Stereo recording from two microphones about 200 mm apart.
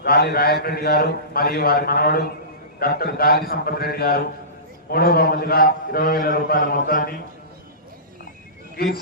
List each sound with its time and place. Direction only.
0.0 s a man's voice: 50° left (ahead or behind)
8.7 s speech: 50° left (ahead or behind)